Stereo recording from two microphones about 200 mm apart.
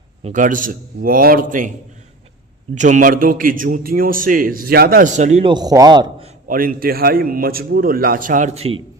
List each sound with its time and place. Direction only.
0.2 s a man's voice: 35° right (ahead or behind)
2.7 s a man's voice: 40° right (ahead or behind)
5.5 s a man's voice: 20° right (ahead or behind)
6.5 s a man's voice: 45° right (ahead or behind)